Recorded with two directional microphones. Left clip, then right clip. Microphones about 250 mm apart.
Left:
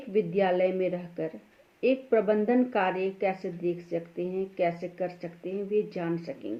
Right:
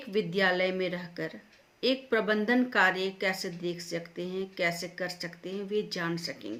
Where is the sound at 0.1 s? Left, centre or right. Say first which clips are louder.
Left 2 dB; right.